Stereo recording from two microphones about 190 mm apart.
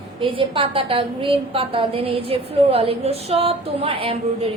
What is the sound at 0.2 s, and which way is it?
A woman's voice, 25° right (ahead or behind).